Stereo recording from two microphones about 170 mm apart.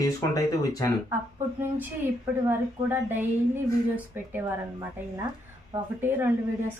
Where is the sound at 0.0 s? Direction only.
20° left (ahead or behind).